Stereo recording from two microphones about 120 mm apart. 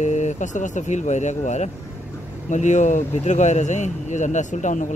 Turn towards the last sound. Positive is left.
turn(degrees=90)